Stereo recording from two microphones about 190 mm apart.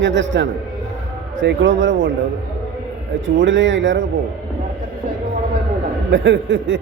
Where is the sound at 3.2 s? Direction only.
75° right (ahead or behind).